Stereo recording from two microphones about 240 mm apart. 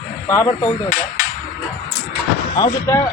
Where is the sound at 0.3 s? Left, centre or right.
Centre.